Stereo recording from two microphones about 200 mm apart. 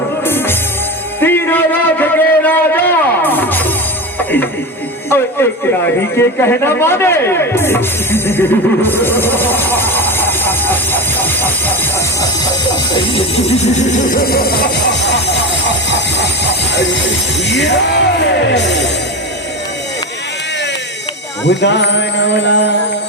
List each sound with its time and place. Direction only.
0.3 s music: 10° left (ahead or behind)
1.2 s a sound: 10° left (ahead or behind)
4.2 s music: 10° left (ahead or behind)
5.0 s speech: 10° left (ahead or behind)
12.9 s music: 25° left (ahead or behind); by 15.4 s 60° left (ahead or behind)
15.9 s a sound: 60° left (ahead or behind)
16.7 s speech: 65° left (ahead or behind)
21.4 s speech: 60° left (ahead or behind)